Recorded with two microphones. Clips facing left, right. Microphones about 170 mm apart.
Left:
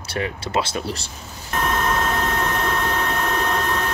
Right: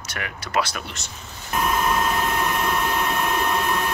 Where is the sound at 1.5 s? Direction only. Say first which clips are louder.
Even; 5° right (ahead or behind).